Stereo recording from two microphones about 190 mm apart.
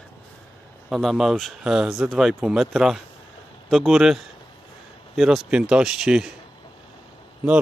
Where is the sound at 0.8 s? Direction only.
Centre (ahead or behind).